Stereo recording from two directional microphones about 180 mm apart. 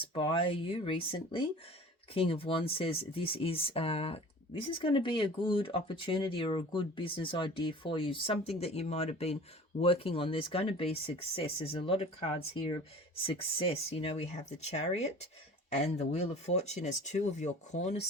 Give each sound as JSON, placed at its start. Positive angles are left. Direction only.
{"t": 0.1, "sound": "speech", "side_deg": 30}